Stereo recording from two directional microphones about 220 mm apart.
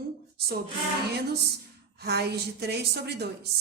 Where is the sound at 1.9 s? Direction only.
45° right (ahead or behind).